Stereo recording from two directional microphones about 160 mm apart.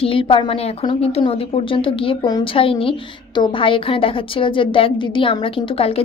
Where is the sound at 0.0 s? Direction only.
35° left (ahead or behind).